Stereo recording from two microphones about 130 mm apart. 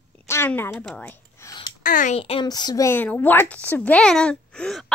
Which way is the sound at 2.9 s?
15° left (ahead or behind).